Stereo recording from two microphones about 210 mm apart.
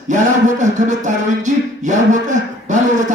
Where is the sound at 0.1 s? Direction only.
35° right (ahead or behind).